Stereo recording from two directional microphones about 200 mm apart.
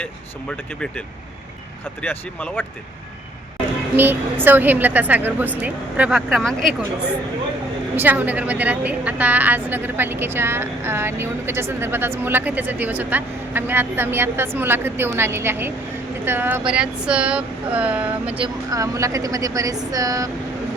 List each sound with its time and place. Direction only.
0.5 s speech: 5° left (ahead or behind)
3.9 s a woman's voice: 10° right (ahead or behind)
7.9 s a woman's voice: 10° right (ahead or behind)
18.3 s a woman's voice: 20° right (ahead or behind)